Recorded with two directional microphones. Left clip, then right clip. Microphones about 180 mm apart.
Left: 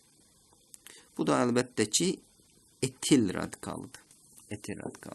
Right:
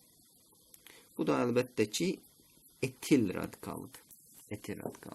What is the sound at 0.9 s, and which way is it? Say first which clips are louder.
Speech: left 3 dB; 35° left (ahead or behind).